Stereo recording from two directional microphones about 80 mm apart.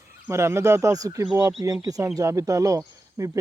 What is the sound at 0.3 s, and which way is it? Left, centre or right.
Speech, right.